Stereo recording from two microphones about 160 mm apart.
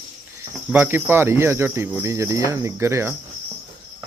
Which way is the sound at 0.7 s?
15° right (ahead or behind).